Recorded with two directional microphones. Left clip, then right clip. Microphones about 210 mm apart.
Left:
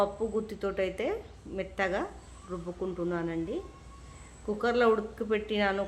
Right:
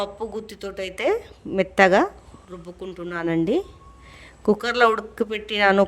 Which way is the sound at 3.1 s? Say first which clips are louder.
Right 10 dB; 45° right (ahead or behind).